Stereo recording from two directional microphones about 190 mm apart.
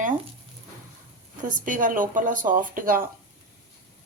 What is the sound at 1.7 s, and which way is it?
A woman's voice, 45° right (ahead or behind).